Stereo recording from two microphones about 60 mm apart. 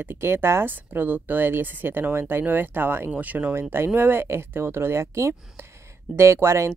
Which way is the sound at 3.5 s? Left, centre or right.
Right.